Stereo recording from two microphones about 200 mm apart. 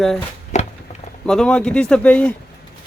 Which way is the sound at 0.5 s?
35° left (ahead or behind).